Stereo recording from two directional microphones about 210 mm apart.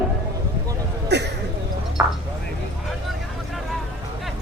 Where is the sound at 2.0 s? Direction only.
10° right (ahead or behind).